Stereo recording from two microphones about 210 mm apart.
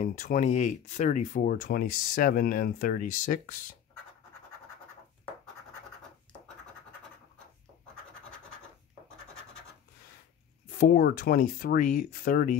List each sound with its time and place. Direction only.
0.0 s speech: 35° left (ahead or behind)
10.7 s speech: 40° left (ahead or behind)